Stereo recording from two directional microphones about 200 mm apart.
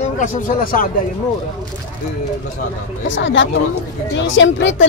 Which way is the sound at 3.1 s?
65° left (ahead or behind).